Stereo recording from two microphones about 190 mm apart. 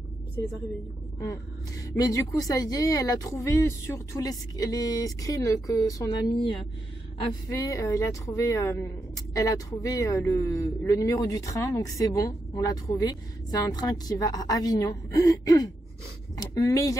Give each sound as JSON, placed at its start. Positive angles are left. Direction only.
{"t": 1.2, "sound": "speech", "side_deg": 15}